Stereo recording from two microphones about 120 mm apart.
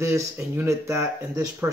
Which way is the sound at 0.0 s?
25° right (ahead or behind).